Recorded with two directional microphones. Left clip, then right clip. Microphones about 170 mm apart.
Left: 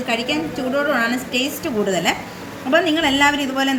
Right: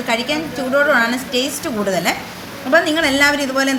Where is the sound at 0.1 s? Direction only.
20° right (ahead or behind).